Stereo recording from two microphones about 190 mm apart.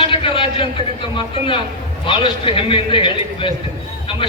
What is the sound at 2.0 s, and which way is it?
A man's voice, 25° left (ahead or behind).